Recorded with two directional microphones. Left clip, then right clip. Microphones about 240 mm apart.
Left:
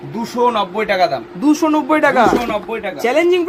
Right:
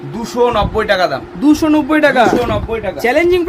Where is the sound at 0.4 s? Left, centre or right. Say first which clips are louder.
Right 3 dB; centre.